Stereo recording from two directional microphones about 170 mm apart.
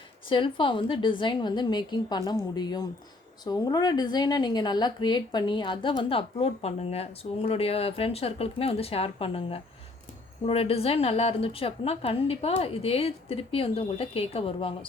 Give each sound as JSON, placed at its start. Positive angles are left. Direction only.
{"t": 0.3, "sound": "a woman's voice", "side_deg": 30}